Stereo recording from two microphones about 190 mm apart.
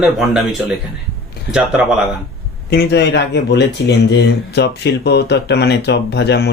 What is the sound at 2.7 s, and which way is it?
Speech, 60° left (ahead or behind).